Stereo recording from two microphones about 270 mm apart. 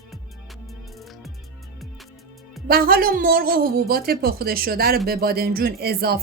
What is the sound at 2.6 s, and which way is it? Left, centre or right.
Speech, right.